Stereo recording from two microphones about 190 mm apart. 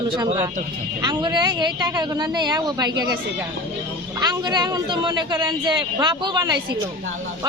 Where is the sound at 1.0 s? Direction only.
20° right (ahead or behind).